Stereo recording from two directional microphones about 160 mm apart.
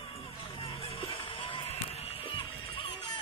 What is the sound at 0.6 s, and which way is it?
Music, 35° left (ahead or behind).